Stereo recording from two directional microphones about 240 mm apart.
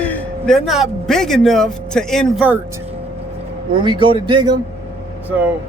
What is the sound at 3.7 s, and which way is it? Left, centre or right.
Speech, centre.